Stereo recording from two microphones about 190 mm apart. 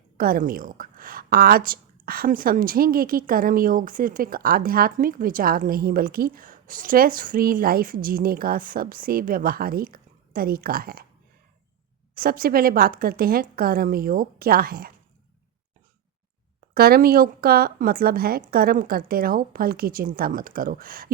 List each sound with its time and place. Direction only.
0.2 s a woman's voice: 50° right (ahead or behind)
12.1 s a woman's voice: 50° right (ahead or behind)
16.7 s a woman's voice: 55° right (ahead or behind)